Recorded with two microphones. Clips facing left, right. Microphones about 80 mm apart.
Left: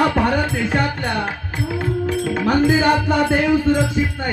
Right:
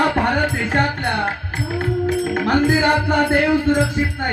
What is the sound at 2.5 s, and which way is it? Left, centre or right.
Music, right.